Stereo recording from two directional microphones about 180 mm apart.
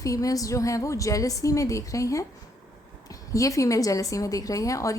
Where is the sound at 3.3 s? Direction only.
20° left (ahead or behind).